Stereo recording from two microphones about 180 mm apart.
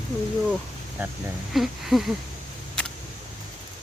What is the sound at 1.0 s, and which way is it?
Speech, 10° right (ahead or behind).